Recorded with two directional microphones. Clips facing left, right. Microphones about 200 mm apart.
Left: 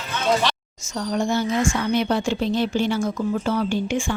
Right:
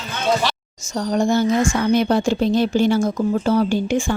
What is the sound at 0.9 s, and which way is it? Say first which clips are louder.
A woman's voice: right 4 dB; 40° right (ahead or behind).